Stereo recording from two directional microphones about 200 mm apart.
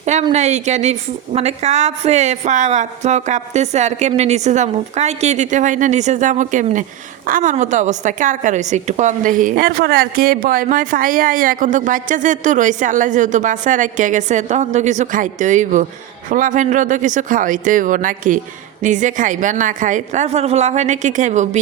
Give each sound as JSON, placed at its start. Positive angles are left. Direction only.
{"t": 0.0, "sound": "a woman's voice", "side_deg": -35}